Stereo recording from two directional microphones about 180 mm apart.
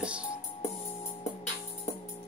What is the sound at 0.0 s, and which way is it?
Music, 5° right (ahead or behind).